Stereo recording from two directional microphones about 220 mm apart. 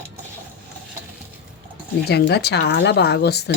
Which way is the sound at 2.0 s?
50° left (ahead or behind).